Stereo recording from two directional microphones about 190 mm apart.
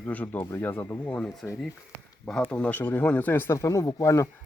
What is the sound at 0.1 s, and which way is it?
Speech, 10° left (ahead or behind).